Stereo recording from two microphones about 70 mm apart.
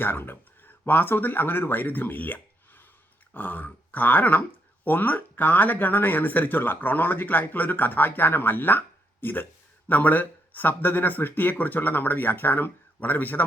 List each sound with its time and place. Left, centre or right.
0.0 s speech: left